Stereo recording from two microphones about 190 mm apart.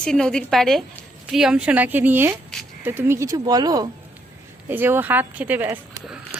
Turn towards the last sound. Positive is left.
turn(degrees=-10)  # may be behind; listen again after turning